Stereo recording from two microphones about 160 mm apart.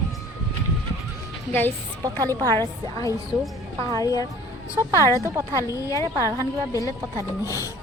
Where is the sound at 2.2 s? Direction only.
20° right (ahead or behind).